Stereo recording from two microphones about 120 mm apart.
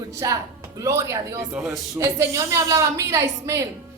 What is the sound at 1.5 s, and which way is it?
Speech, 5° right (ahead or behind).